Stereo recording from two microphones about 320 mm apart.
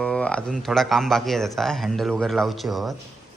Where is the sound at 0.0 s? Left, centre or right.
Centre.